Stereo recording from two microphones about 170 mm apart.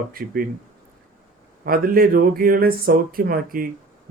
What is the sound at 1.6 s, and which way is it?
Speech, 60° right (ahead or behind).